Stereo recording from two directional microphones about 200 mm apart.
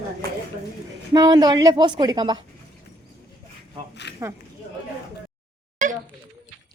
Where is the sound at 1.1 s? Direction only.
20° right (ahead or behind).